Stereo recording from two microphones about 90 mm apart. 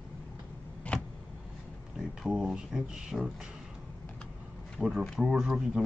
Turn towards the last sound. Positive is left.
turn(degrees=-5)  # may be behind; listen again after turning